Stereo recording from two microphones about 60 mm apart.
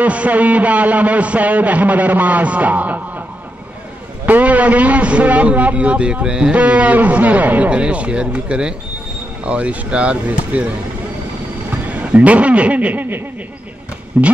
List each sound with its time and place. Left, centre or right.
0.0 s a man's voice: right
4.3 s a man's voice: right
11.7 s speech: right